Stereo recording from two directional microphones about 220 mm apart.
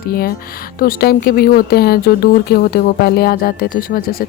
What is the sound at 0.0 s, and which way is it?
Speech, 40° left (ahead or behind).